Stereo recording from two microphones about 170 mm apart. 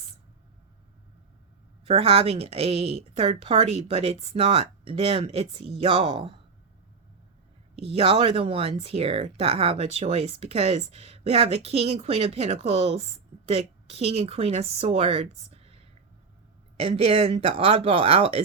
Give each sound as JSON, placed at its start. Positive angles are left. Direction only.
{"t": 1.9, "sound": "a woman's voice", "side_deg": -35}
{"t": 7.8, "sound": "a woman's voice", "side_deg": -35}